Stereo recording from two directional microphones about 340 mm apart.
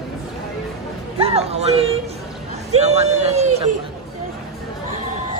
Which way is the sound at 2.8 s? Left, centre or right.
Centre.